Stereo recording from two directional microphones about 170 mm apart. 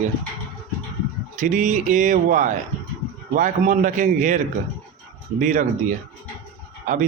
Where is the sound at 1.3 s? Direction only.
50° right (ahead or behind).